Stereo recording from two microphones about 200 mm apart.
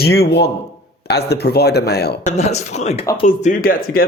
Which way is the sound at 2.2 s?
35° left (ahead or behind).